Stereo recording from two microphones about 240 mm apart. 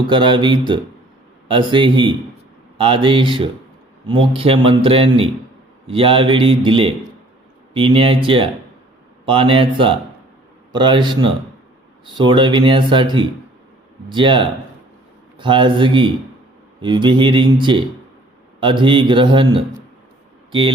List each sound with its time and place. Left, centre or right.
0.1 s speech: centre